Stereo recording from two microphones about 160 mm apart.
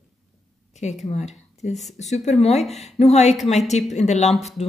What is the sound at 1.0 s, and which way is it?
Speech, 45° left (ahead or behind).